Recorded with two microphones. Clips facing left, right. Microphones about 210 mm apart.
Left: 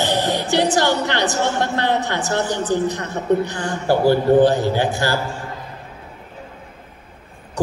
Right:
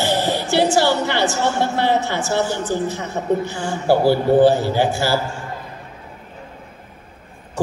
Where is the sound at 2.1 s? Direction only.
15° left (ahead or behind).